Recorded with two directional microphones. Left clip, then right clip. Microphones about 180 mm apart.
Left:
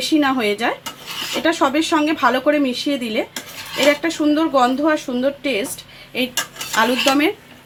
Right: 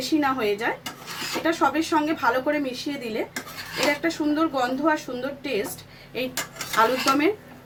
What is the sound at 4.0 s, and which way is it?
Speech, 45° left (ahead or behind).